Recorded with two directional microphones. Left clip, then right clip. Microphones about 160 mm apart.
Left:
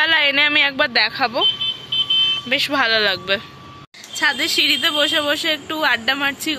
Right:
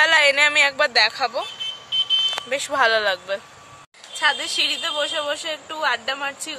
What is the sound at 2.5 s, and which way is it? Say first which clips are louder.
Speech: right 1 dB; 20° right (ahead or behind).